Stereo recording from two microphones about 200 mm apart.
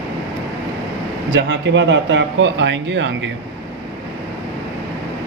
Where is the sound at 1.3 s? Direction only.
65° right (ahead or behind).